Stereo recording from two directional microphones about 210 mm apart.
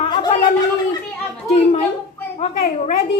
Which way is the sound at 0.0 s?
20° left (ahead or behind).